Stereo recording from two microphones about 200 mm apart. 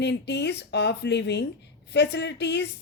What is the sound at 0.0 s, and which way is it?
A woman's voice, 60° left (ahead or behind).